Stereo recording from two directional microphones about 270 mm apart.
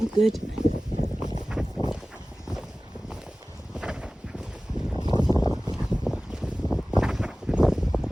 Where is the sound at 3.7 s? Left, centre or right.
Centre.